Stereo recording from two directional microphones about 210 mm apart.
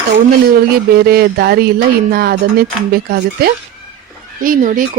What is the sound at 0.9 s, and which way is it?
Speech, 50° right (ahead or behind).